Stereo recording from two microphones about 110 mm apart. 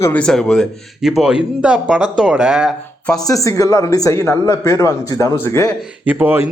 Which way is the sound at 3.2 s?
30° left (ahead or behind).